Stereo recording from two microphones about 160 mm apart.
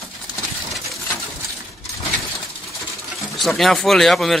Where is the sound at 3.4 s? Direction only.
Centre (ahead or behind).